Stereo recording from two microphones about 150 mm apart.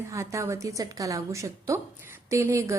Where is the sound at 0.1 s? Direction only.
20° right (ahead or behind).